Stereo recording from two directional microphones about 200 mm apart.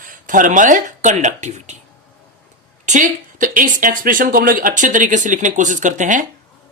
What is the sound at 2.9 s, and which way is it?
Speech, 40° right (ahead or behind).